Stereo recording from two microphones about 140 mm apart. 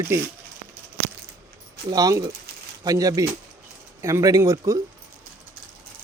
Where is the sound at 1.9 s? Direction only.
25° right (ahead or behind).